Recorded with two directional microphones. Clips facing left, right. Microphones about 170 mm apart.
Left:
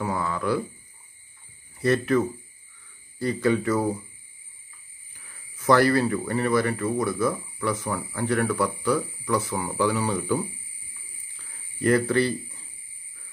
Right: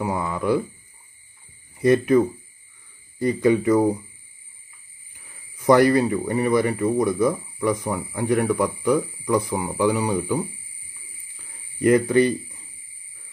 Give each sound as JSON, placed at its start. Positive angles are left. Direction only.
{"t": 0.0, "sound": "speech", "side_deg": -20}
{"t": 1.8, "sound": "speech", "side_deg": -15}
{"t": 5.1, "sound": "speech", "side_deg": -20}
{"t": 11.8, "sound": "speech", "side_deg": -20}